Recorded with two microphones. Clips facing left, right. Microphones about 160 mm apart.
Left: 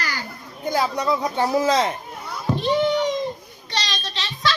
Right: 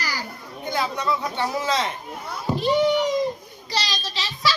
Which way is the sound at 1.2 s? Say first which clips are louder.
Left 5 dB; 35° left (ahead or behind).